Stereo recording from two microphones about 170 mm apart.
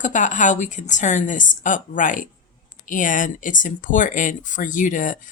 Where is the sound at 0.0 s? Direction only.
45° left (ahead or behind).